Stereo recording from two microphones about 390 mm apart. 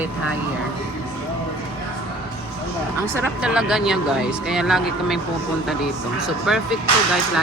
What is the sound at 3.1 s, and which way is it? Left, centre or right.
Speech, centre.